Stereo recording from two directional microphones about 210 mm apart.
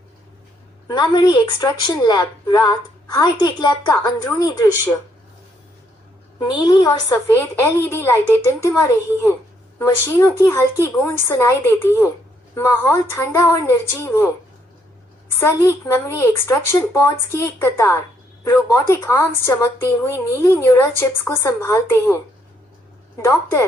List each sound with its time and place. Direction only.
0.9 s a woman's voice: 20° left (ahead or behind)
6.4 s a woman's voice: 20° left (ahead or behind)
15.4 s a woman's voice: 10° left (ahead or behind)
23.2 s a woman's voice: 15° left (ahead or behind)